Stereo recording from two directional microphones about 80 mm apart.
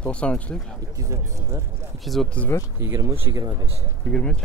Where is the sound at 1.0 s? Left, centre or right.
Right.